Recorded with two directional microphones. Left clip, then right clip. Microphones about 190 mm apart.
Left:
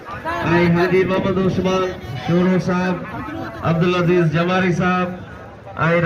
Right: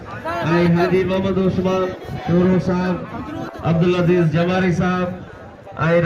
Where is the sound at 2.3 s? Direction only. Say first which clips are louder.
Even; 30° left (ahead or behind).